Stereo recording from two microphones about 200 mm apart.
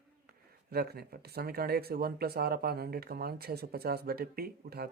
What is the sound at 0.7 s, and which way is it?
Speech, 50° right (ahead or behind).